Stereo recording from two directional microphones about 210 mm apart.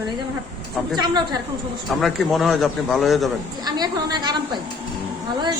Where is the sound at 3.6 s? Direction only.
20° right (ahead or behind).